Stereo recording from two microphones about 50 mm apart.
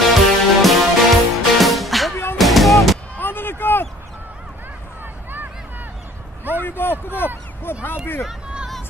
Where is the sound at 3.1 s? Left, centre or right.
Left.